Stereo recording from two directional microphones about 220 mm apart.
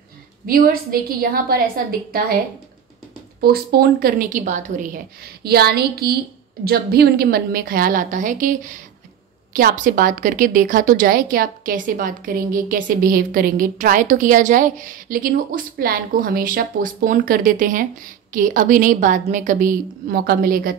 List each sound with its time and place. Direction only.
0.5 s a woman's voice: 40° right (ahead or behind)
3.3 s a woman's voice: 45° right (ahead or behind)